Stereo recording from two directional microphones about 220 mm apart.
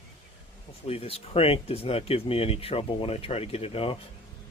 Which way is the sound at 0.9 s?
25° left (ahead or behind).